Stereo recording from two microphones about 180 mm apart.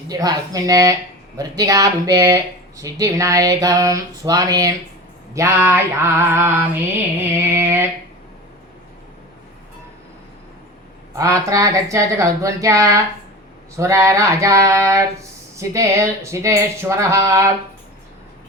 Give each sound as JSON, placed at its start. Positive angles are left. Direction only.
{"t": 0.1, "sound": "speech", "side_deg": -20}
{"t": 11.2, "sound": "speech", "side_deg": -20}